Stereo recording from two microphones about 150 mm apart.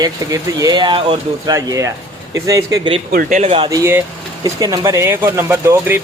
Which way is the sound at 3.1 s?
90° right.